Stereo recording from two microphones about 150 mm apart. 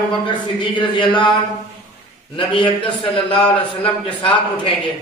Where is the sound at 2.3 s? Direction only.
35° left (ahead or behind).